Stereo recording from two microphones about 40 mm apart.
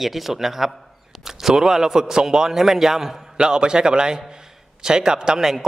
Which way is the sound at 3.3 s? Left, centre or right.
Right.